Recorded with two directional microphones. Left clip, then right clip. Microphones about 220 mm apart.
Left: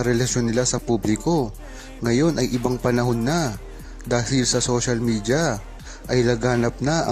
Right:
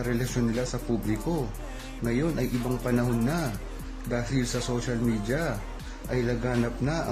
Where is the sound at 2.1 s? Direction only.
40° left (ahead or behind).